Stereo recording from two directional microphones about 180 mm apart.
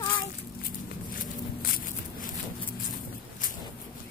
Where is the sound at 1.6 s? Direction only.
50° left (ahead or behind).